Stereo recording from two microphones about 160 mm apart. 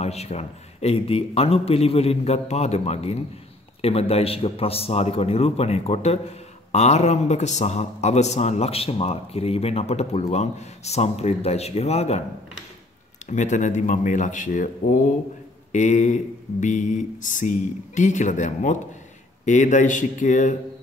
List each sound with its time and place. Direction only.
0.0 s a man's voice: 40° left (ahead or behind)
13.3 s speech: 50° left (ahead or behind)